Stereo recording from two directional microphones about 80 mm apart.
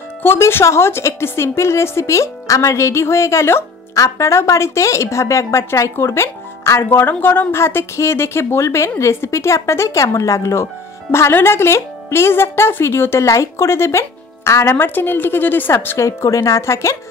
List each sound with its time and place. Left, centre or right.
0.2 s a woman's voice: left
16.1 s a woman's voice: left